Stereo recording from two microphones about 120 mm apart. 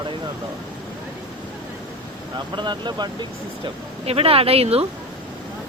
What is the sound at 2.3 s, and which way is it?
Speech, 40° right (ahead or behind).